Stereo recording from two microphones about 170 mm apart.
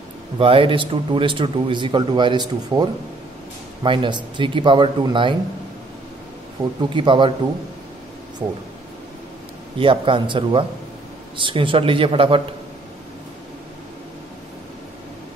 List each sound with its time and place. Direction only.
0.4 s speech: 30° right (ahead or behind)
6.9 s speech: 30° right (ahead or behind)
9.8 s speech: 30° right (ahead or behind)